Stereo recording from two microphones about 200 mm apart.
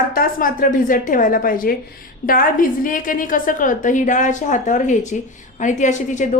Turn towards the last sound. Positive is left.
turn(degrees=40)  # may be behind; listen again after turning